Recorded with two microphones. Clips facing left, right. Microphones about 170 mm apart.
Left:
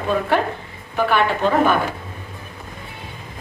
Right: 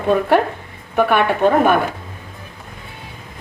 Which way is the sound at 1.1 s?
55° right (ahead or behind).